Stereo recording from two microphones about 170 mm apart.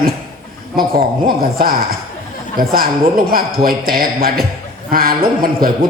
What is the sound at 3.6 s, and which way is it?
A man's voice, 60° right (ahead or behind).